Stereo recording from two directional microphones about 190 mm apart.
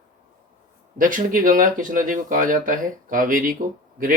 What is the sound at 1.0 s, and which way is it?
Speech, 45° right (ahead or behind).